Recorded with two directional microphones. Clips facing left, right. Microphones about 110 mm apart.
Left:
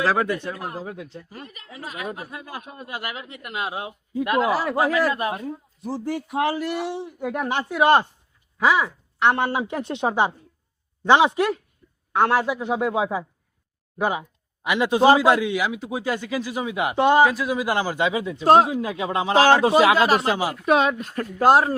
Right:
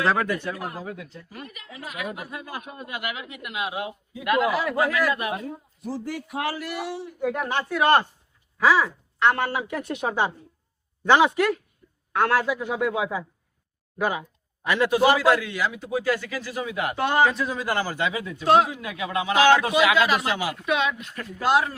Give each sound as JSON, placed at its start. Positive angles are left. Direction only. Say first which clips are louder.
{"t": 0.2, "sound": "a man's voice", "louder": "left 2 dB", "side_deg": 20}
{"t": 17.2, "sound": "a man's voice", "louder": "left 3 dB", "side_deg": 5}
{"t": 18.4, "sound": "speech", "louder": "left 3 dB", "side_deg": 40}